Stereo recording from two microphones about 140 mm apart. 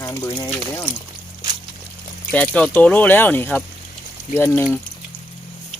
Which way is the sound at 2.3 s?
10° left (ahead or behind).